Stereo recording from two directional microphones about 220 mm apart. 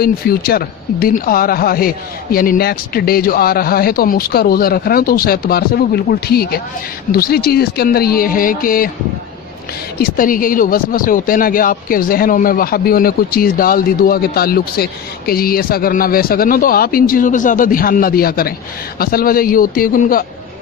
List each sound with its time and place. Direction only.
0.0 s speech: 45° left (ahead or behind)
10.0 s speech: 40° left (ahead or behind)